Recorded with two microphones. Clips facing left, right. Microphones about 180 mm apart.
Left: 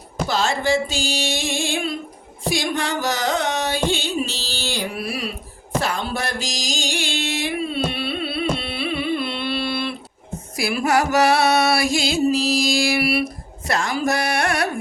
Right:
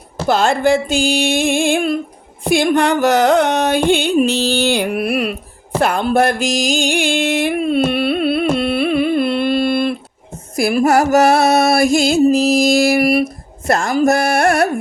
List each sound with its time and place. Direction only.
0.3 s carnatic music: 55° right (ahead or behind)
5.8 s music: 55° right (ahead or behind)